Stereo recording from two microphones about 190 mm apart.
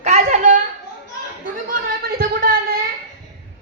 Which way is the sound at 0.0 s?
35° right (ahead or behind).